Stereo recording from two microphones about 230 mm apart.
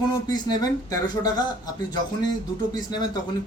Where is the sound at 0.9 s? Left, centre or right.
Centre.